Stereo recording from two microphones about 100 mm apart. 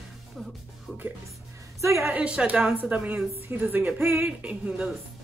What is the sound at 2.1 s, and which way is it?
Speech, 10° right (ahead or behind).